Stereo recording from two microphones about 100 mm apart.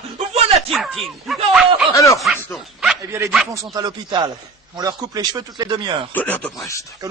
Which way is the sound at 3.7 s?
45° right (ahead or behind).